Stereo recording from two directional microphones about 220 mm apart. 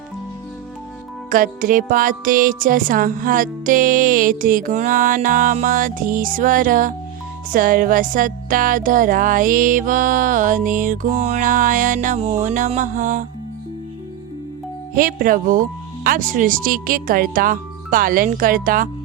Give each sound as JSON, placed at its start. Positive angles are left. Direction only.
{"t": 1.3, "sound": "music", "side_deg": -40}
{"t": 14.9, "sound": "music", "side_deg": -40}